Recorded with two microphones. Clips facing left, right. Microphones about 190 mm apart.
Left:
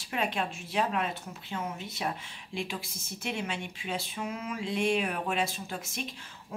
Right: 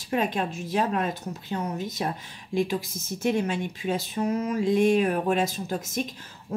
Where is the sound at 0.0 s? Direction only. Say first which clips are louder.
Right 6 dB; 40° right (ahead or behind).